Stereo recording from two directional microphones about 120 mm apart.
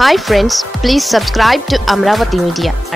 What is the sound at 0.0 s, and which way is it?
Speech, centre (ahead or behind).